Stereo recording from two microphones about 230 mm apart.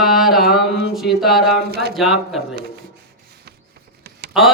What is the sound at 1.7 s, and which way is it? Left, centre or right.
Speech, right.